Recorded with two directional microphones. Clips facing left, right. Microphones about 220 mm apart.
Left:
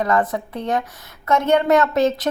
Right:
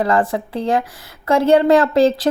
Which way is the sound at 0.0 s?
30° right (ahead or behind).